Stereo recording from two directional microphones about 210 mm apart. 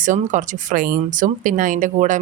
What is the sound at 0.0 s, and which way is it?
Speech, 35° right (ahead or behind).